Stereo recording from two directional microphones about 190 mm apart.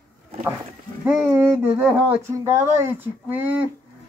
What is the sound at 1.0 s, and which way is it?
Speech, 10° right (ahead or behind).